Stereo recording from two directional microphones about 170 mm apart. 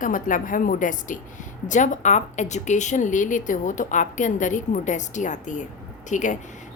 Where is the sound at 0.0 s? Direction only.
50° left (ahead or behind).